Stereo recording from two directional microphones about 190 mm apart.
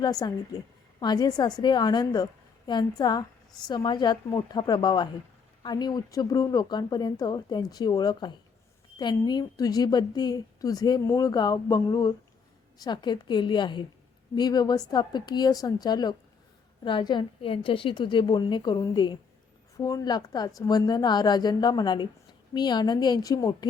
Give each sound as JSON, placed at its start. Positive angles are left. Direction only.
{"t": 0.0, "sound": "a woman's voice", "side_deg": 20}